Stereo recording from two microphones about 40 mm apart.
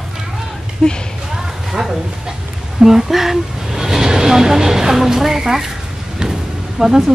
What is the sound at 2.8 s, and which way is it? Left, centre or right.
Speech, centre.